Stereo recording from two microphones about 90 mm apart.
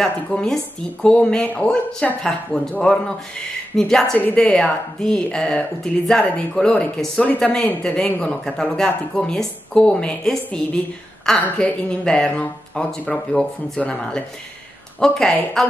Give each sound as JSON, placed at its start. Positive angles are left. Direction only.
{"t": 0.0, "sound": "speech", "side_deg": 5}
{"t": 3.7, "sound": "speech", "side_deg": 5}